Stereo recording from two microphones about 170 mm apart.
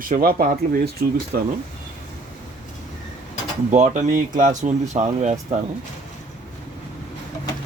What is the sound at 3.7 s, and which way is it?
Speech, 45° right (ahead or behind).